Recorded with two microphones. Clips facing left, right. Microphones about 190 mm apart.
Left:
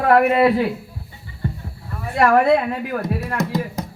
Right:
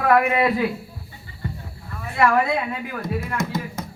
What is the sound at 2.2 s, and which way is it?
Speech, 55° left (ahead or behind).